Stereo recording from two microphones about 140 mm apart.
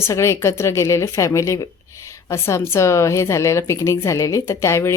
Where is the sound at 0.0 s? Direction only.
20° left (ahead or behind).